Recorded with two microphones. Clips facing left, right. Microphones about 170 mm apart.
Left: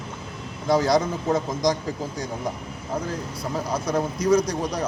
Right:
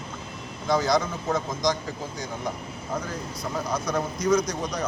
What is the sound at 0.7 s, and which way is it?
A man's voice, 35° left (ahead or behind).